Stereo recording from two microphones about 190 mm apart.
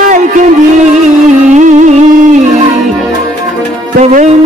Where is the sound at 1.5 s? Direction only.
40° right (ahead or behind).